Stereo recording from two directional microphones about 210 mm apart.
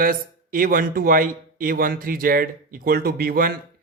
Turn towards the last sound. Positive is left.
turn(degrees=-45)  # may be behind; listen again after turning